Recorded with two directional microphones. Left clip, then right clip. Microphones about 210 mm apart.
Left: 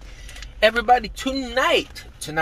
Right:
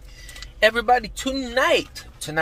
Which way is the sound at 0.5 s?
15° right (ahead or behind).